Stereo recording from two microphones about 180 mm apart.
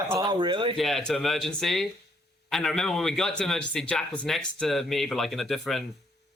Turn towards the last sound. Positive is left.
turn(degrees=0)  # may be behind; listen again after turning